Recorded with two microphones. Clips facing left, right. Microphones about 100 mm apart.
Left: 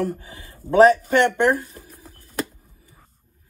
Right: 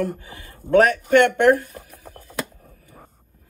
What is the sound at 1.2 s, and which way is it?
Speech, 20° left (ahead or behind).